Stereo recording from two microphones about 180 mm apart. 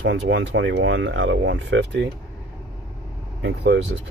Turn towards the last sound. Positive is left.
turn(degrees=-80)